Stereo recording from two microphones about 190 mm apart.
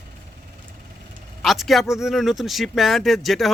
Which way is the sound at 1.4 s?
Centre (ahead or behind).